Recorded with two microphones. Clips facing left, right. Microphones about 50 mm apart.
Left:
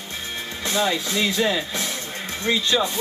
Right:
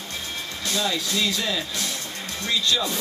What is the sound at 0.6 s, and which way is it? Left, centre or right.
Speech, left.